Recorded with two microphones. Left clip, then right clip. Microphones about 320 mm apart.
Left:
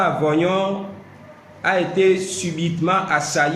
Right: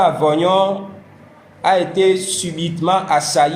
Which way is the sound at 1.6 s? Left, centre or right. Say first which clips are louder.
Right 3 dB; centre.